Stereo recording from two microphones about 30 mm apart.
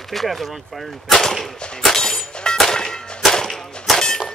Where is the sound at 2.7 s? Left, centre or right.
Centre.